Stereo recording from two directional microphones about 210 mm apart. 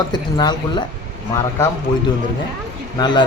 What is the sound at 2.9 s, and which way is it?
Speech, 20° left (ahead or behind).